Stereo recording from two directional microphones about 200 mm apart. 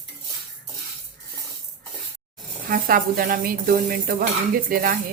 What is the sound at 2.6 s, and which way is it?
Speech, 45° right (ahead or behind).